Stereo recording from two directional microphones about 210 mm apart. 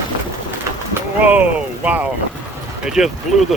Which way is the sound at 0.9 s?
5° right (ahead or behind).